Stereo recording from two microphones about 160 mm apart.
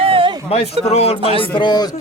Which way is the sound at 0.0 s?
35° right (ahead or behind).